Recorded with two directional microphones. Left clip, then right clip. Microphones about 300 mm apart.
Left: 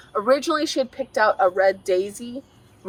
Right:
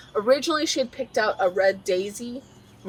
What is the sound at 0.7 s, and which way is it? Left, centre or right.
Speech, centre.